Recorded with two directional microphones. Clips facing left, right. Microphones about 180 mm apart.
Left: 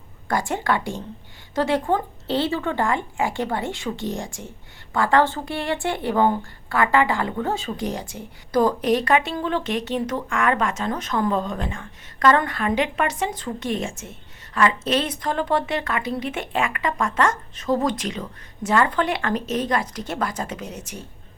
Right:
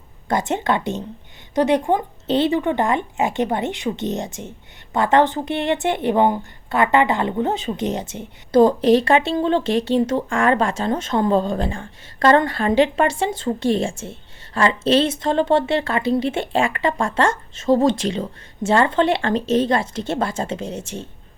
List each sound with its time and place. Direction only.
0.3 s a woman's voice: 20° right (ahead or behind)